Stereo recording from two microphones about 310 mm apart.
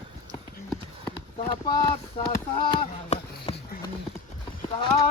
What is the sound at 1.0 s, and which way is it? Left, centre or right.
Speech, centre.